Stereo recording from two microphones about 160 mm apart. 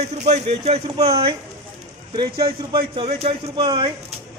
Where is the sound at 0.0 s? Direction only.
45° right (ahead or behind).